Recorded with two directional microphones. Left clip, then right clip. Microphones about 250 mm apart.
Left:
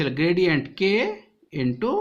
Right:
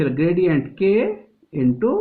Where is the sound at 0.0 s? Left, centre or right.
Left.